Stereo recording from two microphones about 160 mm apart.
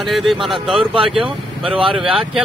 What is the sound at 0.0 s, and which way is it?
Speech, centre (ahead or behind).